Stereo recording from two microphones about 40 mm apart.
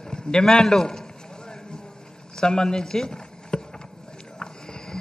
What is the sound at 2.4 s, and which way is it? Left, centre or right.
Speech, centre.